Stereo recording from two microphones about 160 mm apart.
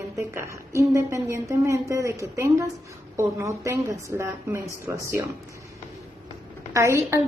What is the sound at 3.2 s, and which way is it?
A woman's voice, 20° right (ahead or behind).